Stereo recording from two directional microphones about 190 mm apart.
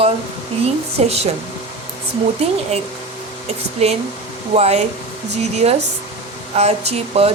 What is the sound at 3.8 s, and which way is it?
Speech, 35° right (ahead or behind).